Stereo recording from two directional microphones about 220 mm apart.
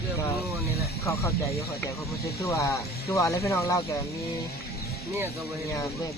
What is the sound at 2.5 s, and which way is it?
Speech, 15° left (ahead or behind).